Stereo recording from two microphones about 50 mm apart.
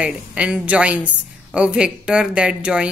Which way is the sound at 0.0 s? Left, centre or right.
Right.